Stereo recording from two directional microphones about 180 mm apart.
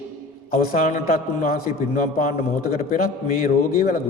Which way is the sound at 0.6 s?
45° left (ahead or behind).